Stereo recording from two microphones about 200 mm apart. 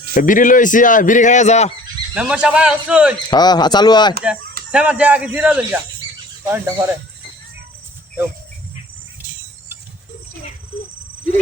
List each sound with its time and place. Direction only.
0.1 s speech: 40° left (ahead or behind)
2.1 s speech: 5° right (ahead or behind)
3.2 s speech: 20° left (ahead or behind)
4.7 s speech: 5° right (ahead or behind)